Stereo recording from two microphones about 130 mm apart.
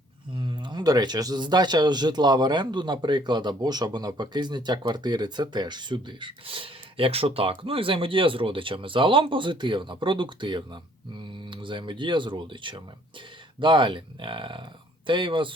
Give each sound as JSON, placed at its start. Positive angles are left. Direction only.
{"t": 0.3, "sound": "a man's voice", "side_deg": -35}